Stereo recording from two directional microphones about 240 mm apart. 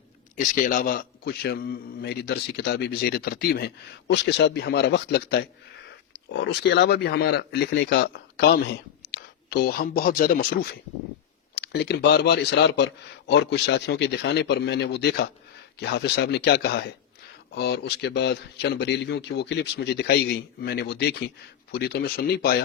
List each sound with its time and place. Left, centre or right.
0.3 s a man's voice: left